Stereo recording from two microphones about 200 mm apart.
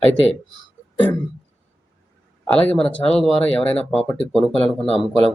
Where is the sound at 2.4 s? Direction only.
5° left (ahead or behind).